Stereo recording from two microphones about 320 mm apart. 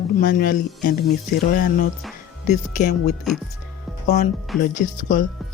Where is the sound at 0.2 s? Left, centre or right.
Left.